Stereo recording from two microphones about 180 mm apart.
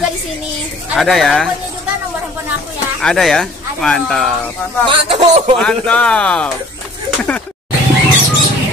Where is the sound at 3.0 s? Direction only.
Centre (ahead or behind).